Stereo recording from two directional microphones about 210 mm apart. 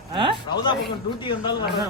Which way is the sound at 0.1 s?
25° right (ahead or behind).